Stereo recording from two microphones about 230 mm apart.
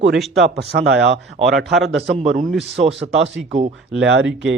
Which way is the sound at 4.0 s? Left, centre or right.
Right.